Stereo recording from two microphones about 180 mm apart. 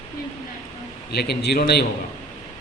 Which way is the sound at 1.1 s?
65° left (ahead or behind).